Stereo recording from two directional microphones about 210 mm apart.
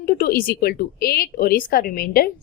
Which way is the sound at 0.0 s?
45° left (ahead or behind).